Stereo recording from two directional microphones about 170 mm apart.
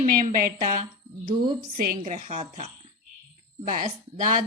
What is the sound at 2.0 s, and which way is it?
Speech, 50° right (ahead or behind).